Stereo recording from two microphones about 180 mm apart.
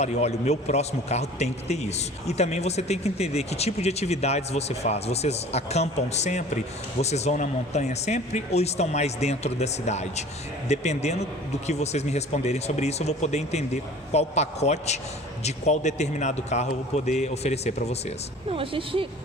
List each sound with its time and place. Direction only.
0.0 s a man's voice: 35° left (ahead or behind)
18.4 s a woman's voice: 30° right (ahead or behind)